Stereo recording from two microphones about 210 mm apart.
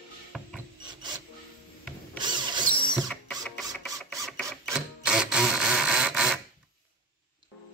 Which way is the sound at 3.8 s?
Centre (ahead or behind).